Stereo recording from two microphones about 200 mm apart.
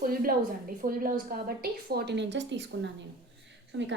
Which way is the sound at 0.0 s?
45° right (ahead or behind).